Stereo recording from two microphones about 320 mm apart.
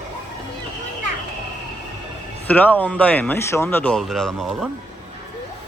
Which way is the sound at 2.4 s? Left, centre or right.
Centre.